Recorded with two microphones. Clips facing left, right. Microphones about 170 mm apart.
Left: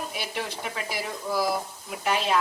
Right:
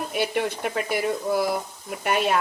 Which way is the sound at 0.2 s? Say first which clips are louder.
Right 12 dB; 55° right (ahead or behind).